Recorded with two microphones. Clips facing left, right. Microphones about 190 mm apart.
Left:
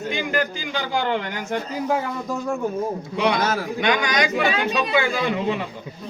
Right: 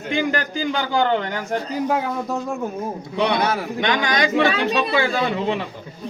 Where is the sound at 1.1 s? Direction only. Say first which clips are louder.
Right 3 dB; 35° right (ahead or behind).